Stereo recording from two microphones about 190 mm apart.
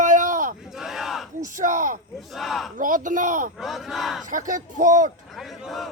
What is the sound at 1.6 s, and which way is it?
Speech, 45° right (ahead or behind).